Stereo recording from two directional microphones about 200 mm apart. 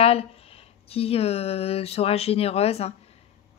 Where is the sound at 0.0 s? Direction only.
30° left (ahead or behind).